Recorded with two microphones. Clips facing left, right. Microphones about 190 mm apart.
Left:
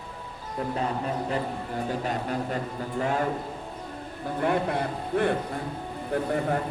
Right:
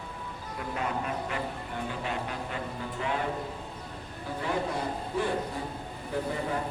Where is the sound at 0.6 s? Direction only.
35° left (ahead or behind).